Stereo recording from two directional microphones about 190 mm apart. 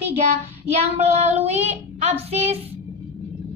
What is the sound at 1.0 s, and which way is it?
Child singing, 35° right (ahead or behind).